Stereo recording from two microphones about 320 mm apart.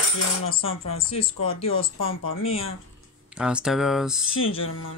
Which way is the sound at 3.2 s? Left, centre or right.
Centre.